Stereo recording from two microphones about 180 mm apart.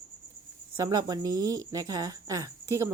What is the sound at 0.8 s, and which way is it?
Cricket, 20° right (ahead or behind).